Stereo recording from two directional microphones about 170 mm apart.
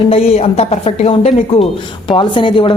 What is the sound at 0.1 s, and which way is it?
A woman's voice, 35° left (ahead or behind).